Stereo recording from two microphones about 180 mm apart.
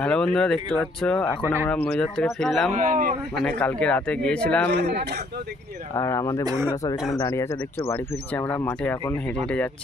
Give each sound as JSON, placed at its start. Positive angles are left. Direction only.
{"t": 0.0, "sound": "speech", "side_deg": 5}
{"t": 2.7, "sound": "speech", "side_deg": -45}
{"t": 3.4, "sound": "a man's voice", "side_deg": 5}
{"t": 4.7, "sound": "a man's voice", "side_deg": -65}
{"t": 5.9, "sound": "a man's voice", "side_deg": 15}
{"t": 6.4, "sound": "speech", "side_deg": -15}
{"t": 7.2, "sound": "a man's voice", "side_deg": 15}